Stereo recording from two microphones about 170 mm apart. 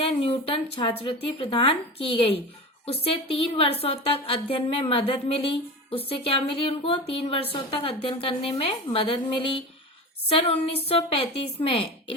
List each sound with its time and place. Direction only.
0.0 s a woman's voice: 35° left (ahead or behind)